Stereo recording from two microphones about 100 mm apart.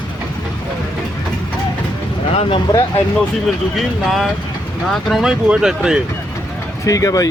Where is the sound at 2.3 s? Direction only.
60° left (ahead or behind).